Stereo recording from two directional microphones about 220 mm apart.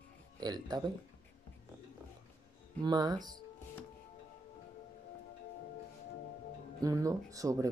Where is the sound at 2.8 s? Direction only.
20° right (ahead or behind).